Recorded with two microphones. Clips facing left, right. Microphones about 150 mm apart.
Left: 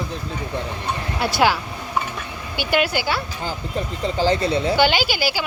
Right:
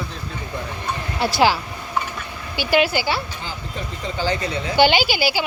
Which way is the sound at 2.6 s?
50° left (ahead or behind).